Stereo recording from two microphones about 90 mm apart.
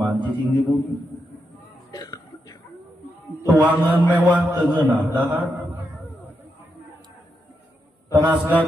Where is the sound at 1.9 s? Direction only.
45° left (ahead or behind).